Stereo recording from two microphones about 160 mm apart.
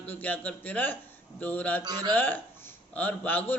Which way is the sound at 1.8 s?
25° right (ahead or behind).